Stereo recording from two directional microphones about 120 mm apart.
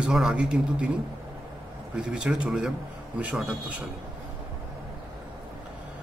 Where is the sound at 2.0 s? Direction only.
10° right (ahead or behind).